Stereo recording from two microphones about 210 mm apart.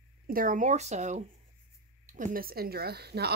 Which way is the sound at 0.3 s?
40° right (ahead or behind).